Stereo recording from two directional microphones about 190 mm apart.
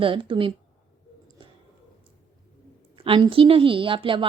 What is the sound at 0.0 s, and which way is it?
Speech, 25° right (ahead or behind).